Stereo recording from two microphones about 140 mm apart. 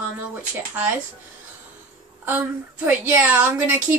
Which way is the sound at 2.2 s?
15° right (ahead or behind).